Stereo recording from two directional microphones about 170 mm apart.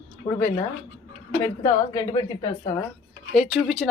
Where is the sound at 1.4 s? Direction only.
15° left (ahead or behind).